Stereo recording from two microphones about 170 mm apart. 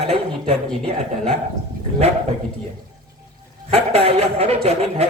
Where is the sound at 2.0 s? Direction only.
40° right (ahead or behind).